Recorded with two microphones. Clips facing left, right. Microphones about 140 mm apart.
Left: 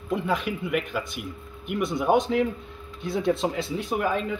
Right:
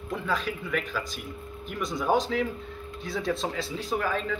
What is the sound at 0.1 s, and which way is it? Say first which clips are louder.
Speech: left 4 dB; 20° left (ahead or behind).